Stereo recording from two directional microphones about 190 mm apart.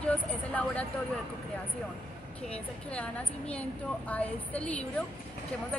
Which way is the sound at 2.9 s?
5° left (ahead or behind).